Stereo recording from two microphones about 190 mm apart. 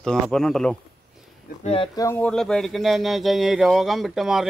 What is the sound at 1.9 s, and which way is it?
Speech, 15° left (ahead or behind).